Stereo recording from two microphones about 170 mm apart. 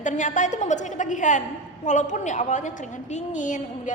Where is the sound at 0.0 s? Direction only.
45° left (ahead or behind).